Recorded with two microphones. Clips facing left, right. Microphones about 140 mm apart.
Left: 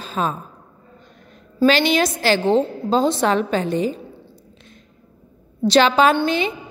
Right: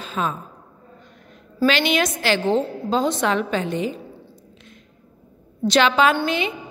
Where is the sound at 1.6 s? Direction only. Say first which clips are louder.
Left 3 dB; 35° left (ahead or behind).